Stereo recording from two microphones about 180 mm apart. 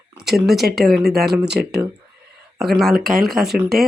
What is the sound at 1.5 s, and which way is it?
Speech, 65° right (ahead or behind).